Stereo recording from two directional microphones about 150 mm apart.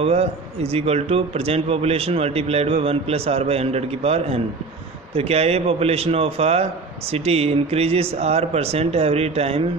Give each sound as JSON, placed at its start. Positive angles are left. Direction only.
{"t": 0.0, "sound": "a man's voice", "side_deg": -40}